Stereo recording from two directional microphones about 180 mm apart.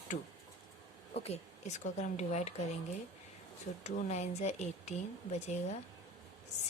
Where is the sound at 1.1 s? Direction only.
35° left (ahead or behind).